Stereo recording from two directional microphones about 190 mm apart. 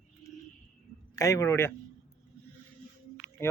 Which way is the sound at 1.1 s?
15° left (ahead or behind).